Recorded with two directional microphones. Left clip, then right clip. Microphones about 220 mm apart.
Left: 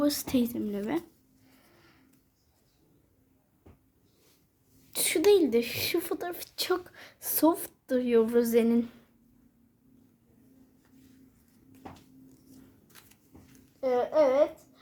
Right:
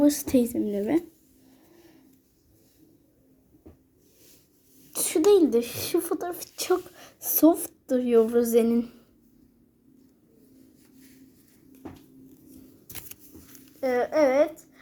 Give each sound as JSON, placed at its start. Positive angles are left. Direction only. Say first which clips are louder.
{"t": 0.5, "sound": "speech", "louder": "right 6 dB", "side_deg": 0}
{"t": 4.9, "sound": "speech", "louder": "right 3 dB", "side_deg": 0}
{"t": 12.9, "sound": "a sound", "louder": "right 14 dB", "side_deg": -40}
{"t": 13.8, "sound": "a child's voice", "louder": "right 2 dB", "side_deg": -20}